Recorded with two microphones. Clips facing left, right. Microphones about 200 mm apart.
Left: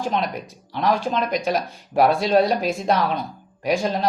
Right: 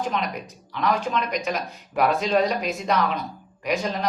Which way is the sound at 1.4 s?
30° left (ahead or behind).